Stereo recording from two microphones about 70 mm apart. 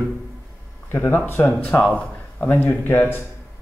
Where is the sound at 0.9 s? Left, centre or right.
Left.